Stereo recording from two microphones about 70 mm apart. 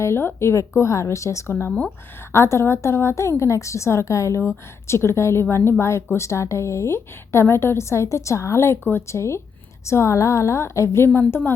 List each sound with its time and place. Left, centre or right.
0.0 s a woman's voice: left